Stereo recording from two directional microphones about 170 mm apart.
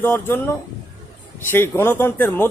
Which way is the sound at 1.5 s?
15° left (ahead or behind).